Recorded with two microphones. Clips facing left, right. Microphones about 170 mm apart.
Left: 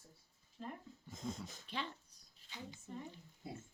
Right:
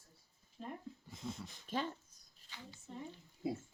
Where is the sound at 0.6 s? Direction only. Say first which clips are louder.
Right 1 dB; 20° right (ahead or behind).